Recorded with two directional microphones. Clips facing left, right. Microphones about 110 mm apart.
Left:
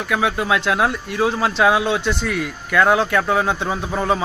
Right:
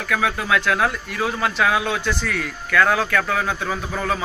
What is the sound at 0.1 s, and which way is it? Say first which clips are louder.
Speech: left 1 dB; 20° left (ahead or behind).